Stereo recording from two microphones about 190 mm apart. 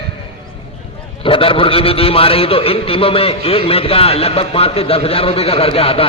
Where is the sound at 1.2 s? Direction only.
30° left (ahead or behind).